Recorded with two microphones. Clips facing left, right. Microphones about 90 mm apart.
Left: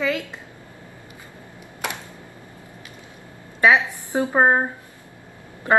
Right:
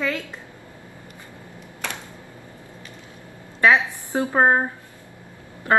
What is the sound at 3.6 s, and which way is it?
A woman's voice, 15° left (ahead or behind).